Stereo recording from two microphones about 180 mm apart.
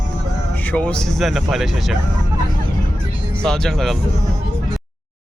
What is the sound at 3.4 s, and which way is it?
Speech, centre (ahead or behind).